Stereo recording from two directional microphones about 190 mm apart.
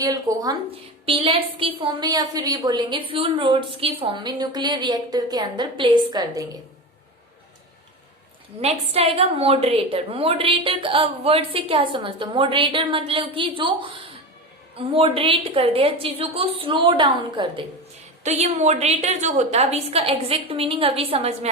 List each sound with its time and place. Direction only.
0.0 s a woman's voice: 20° right (ahead or behind)
1.0 s a woman's voice: 30° right (ahead or behind)
8.6 s a woman's voice: 30° right (ahead or behind)
18.2 s a woman's voice: 35° right (ahead or behind)